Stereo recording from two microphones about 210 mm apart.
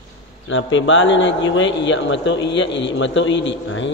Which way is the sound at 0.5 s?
65° left (ahead or behind).